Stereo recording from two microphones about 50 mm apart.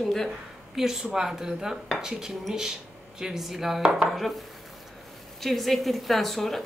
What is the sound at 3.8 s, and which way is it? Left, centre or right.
Speech, centre.